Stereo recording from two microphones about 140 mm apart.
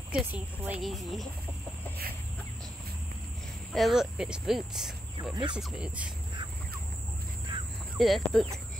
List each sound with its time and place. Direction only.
0.1 s speech: 5° right (ahead or behind)
3.7 s speech: centre (ahead or behind)
5.3 s speech: 35° right (ahead or behind)
7.5 s cricket: 40° right (ahead or behind)
8.0 s speech: centre (ahead or behind)